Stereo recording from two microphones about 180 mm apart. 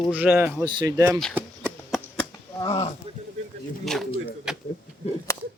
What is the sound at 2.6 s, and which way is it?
Speech, 30° left (ahead or behind).